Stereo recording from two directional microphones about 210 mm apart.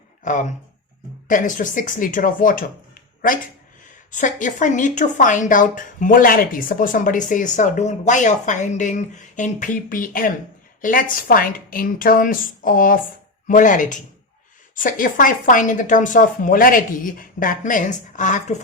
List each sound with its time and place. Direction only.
0.3 s speech: 35° left (ahead or behind)
4.1 s speech: 35° left (ahead or behind)